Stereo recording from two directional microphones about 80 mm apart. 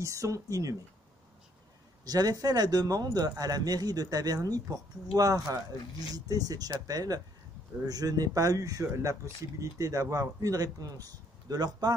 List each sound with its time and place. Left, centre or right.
0.0 s speech: right
2.0 s speech: right